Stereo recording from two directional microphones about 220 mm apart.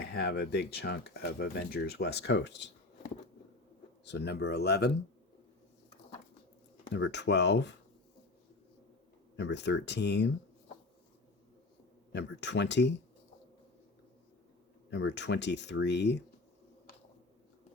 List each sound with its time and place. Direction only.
0.0 s speech: 50° left (ahead or behind)
4.0 s speech: 50° left (ahead or behind)
6.9 s speech: 50° left (ahead or behind)
9.3 s speech: 50° left (ahead or behind)
12.1 s speech: 50° left (ahead or behind)
14.8 s speech: 50° left (ahead or behind)